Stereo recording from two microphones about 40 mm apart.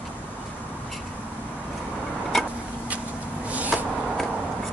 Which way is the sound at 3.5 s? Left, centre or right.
Right.